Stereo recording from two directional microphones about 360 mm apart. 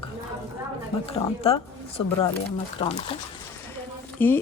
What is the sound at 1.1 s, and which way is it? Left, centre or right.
Speech, centre.